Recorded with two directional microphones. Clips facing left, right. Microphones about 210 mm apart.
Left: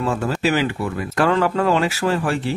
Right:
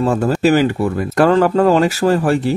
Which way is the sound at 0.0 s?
40° right (ahead or behind).